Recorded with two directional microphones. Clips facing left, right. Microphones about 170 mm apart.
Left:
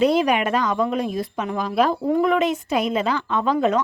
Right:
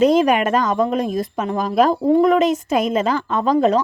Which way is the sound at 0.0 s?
45° right (ahead or behind).